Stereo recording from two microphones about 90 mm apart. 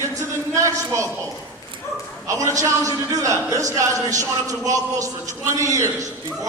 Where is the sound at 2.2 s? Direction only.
35° right (ahead or behind).